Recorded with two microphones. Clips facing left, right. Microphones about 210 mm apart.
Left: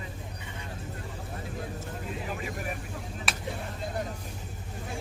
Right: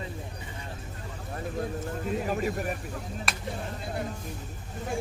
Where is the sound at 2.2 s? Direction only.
45° right (ahead or behind).